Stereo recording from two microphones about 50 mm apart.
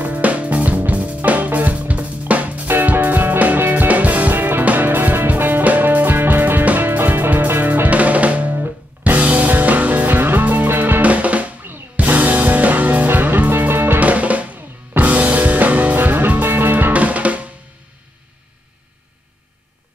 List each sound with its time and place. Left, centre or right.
0.0 s music: right
13.9 s drum: right
15.0 s music: right
16.9 s drum: right